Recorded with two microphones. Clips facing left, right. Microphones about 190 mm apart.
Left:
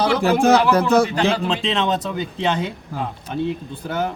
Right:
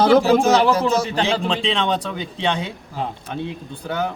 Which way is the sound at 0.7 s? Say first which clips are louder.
Left 3 dB; 60° left (ahead or behind).